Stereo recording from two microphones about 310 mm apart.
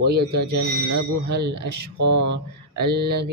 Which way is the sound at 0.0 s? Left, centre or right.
Right.